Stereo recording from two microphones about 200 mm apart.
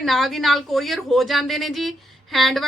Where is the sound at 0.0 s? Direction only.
Centre (ahead or behind).